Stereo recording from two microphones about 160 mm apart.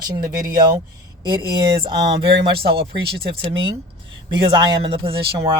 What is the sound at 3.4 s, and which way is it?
Speech, 35° right (ahead or behind).